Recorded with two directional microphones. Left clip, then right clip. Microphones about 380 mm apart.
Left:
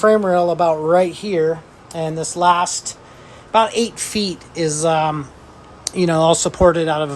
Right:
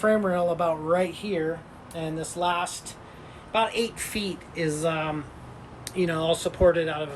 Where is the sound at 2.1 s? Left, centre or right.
Centre.